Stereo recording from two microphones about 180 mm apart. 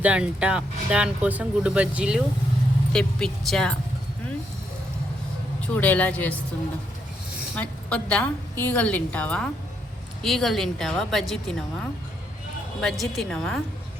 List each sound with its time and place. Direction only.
0.0 s a woman's voice: 5° right (ahead or behind)
5.5 s a woman's voice: 10° left (ahead or behind)
7.5 s a woman's voice: 5° left (ahead or behind)